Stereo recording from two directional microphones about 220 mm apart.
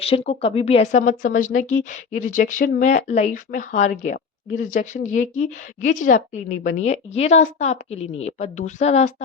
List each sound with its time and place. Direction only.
0.0 s speech: 25° left (ahead or behind)